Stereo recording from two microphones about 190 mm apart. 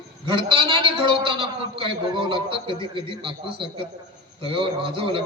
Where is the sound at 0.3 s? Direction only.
25° right (ahead or behind).